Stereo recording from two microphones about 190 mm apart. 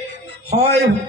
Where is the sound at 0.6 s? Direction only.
60° right (ahead or behind).